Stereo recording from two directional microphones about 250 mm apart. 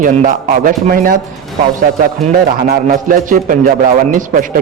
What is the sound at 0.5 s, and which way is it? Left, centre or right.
Speech, right.